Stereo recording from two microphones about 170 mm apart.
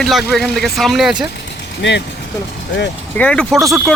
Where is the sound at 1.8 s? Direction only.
90° left.